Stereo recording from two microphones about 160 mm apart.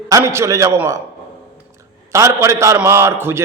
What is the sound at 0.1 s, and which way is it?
Speech, 15° right (ahead or behind).